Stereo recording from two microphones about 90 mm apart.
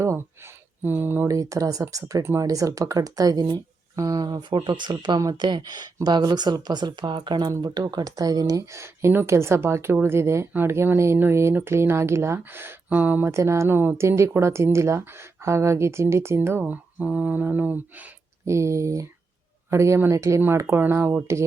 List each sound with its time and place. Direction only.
0.0 s a sound: 30° right (ahead or behind)
1.3 s speech: 40° right (ahead or behind)
2.2 s speech: 30° right (ahead or behind)
2.5 s speech: 40° right (ahead or behind); by 13.3 s 20° right (ahead or behind)
13.3 s speech: 35° right (ahead or behind)
18.4 s speech: 35° right (ahead or behind)